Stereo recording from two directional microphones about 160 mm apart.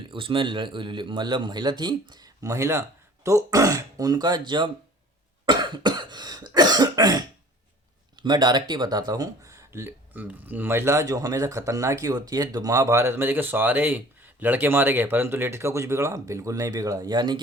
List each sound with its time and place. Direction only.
0.1 s speech: 35° right (ahead or behind)
5.5 s cough: 30° right (ahead or behind)
8.2 s speech: 25° right (ahead or behind)